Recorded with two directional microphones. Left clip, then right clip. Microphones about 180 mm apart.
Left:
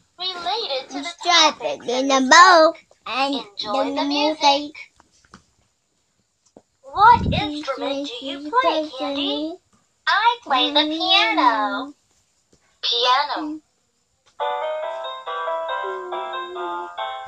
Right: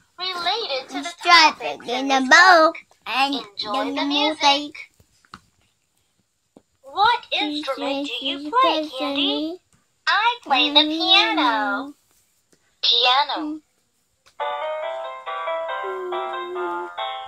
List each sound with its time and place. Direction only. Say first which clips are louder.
0.2 s a sound: right 1 dB; centre (ahead or behind)
1.2 s a child's voice: right 2 dB; 15° left (ahead or behind)
3.3 s a child's voice: left 2 dB; 5° right (ahead or behind)
4.4 s a child's voice: left 2 dB; 10° left (ahead or behind)
7.0 s a woman's voice: left 5 dB; 35° right (ahead or behind)
7.6 s a child's voice: even; 5° right (ahead or behind)
12.8 s a child's voice: right 1 dB; 15° right (ahead or behind)
14.3 s music: left 2 dB; 20° right (ahead or behind)